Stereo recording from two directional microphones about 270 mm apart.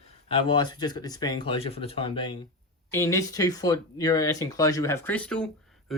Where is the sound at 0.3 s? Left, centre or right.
Centre.